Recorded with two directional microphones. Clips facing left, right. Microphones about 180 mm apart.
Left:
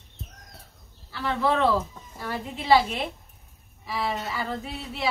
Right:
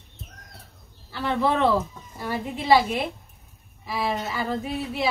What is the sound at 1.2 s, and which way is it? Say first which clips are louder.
Speech: right 1 dB; 20° right (ahead or behind).